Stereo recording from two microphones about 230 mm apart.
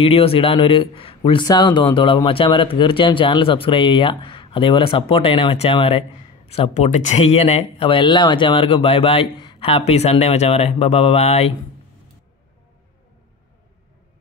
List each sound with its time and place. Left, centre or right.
0.0 s speech: left